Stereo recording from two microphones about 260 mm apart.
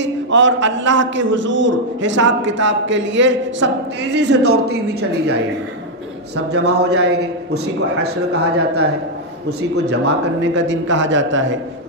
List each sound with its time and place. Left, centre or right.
0.0 s a man's voice: right
6.3 s a man's voice: right
8.0 s a man's voice: right